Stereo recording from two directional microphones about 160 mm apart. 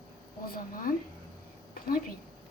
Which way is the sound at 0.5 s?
60° left (ahead or behind).